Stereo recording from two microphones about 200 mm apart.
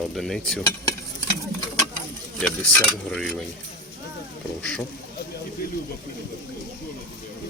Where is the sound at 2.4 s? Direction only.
5° left (ahead or behind).